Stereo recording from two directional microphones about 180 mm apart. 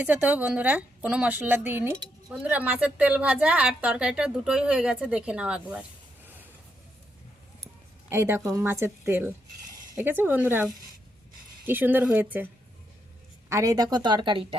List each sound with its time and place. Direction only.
0.0 s a woman's voice: 10° right (ahead or behind)
8.1 s a woman's voice: 15° right (ahead or behind)
13.5 s speech: 20° right (ahead or behind)